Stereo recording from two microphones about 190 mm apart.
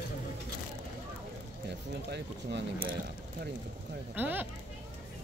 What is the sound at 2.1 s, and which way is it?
Speech, 60° right (ahead or behind).